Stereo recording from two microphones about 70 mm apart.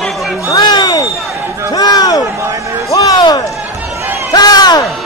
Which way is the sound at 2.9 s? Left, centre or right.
Left.